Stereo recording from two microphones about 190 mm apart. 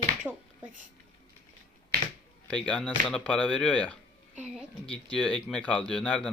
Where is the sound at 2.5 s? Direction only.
5° left (ahead or behind).